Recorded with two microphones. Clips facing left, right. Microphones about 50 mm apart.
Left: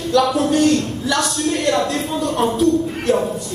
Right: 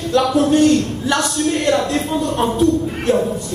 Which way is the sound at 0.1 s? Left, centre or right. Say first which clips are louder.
Right 1 dB; right.